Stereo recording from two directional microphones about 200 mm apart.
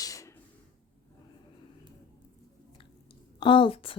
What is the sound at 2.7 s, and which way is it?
Chewing, 25° left (ahead or behind).